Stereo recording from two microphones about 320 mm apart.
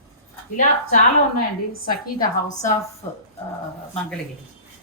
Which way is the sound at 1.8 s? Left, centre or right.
Left.